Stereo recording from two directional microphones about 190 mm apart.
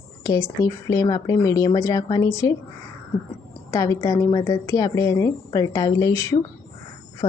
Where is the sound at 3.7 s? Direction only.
15° left (ahead or behind).